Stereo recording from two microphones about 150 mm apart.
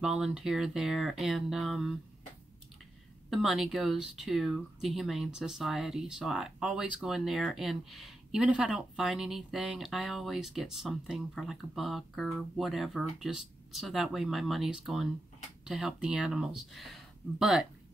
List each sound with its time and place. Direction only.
0.0 s speech: 5° right (ahead or behind)
3.3 s speech: centre (ahead or behind)